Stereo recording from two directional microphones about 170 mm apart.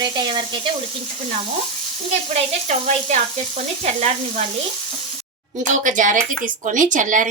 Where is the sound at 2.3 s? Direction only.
45° right (ahead or behind).